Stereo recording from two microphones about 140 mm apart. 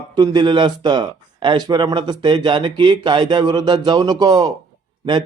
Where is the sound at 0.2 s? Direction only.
35° right (ahead or behind).